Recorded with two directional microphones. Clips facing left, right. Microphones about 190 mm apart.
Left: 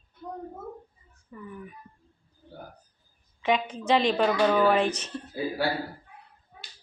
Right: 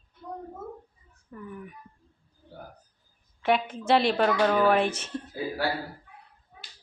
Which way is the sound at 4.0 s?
10° right (ahead or behind).